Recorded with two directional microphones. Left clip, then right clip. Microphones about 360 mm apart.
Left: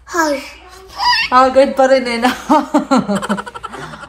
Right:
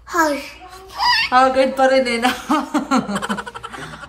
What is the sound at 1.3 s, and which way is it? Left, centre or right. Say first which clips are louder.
A woman's voice: left 7 dB; centre.